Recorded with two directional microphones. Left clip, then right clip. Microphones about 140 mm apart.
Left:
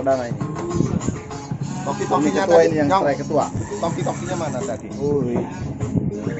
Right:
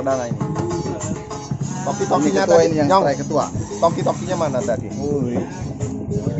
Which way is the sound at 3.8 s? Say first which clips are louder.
Right 7 dB; 85° right.